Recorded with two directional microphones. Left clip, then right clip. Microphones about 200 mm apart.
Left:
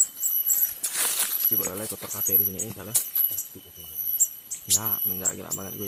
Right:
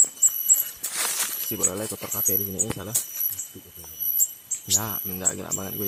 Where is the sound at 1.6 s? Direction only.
30° right (ahead or behind).